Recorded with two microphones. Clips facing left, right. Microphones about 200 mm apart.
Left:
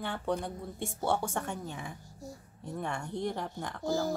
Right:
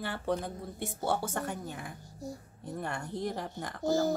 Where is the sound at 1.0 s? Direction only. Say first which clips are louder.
Left 1 dB; 5° right (ahead or behind).